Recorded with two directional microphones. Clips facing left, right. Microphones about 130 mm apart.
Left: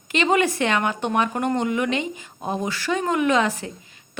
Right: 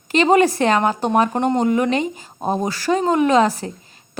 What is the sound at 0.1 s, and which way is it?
Speech, 35° right (ahead or behind).